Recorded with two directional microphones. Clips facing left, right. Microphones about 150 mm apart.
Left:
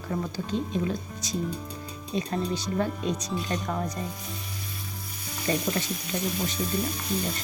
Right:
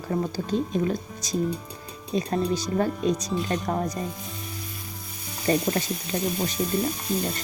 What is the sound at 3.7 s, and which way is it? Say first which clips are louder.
Speech: right 4 dB; 40° right (ahead or behind).